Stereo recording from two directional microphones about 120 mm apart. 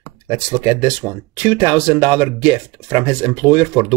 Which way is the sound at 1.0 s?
10° right (ahead or behind).